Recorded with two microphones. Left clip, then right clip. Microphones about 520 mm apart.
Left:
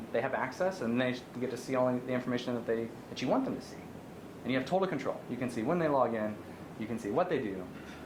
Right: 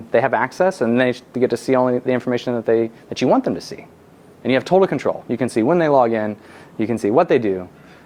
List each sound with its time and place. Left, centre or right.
0.1 s speech: right
4.4 s speech: right